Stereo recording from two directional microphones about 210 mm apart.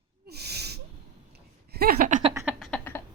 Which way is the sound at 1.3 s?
50° right (ahead or behind).